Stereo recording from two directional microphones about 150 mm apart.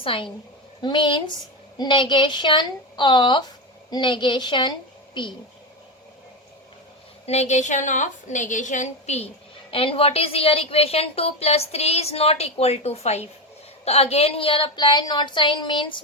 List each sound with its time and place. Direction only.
0.0 s a woman's voice: 35° left (ahead or behind)
7.3 s a woman's voice: 50° left (ahead or behind)
9.7 s a woman's voice: 40° left (ahead or behind)